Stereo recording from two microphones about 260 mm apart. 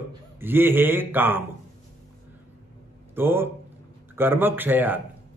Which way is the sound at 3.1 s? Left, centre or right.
Centre.